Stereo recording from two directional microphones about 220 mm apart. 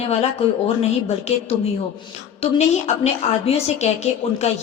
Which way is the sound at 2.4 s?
25° left (ahead or behind).